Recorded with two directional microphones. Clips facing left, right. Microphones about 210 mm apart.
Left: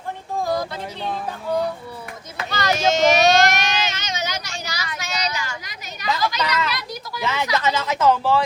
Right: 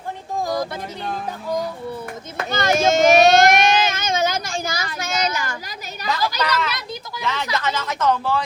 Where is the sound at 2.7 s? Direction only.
50° right (ahead or behind).